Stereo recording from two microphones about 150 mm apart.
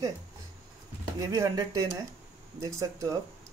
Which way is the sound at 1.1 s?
25° right (ahead or behind).